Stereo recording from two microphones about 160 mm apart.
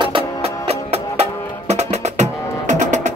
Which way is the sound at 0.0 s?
30° right (ahead or behind).